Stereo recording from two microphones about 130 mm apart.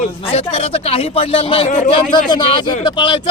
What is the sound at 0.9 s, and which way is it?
Speech, 45° left (ahead or behind).